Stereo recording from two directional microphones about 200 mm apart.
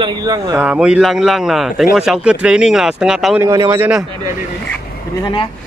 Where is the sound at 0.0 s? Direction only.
20° right (ahead or behind).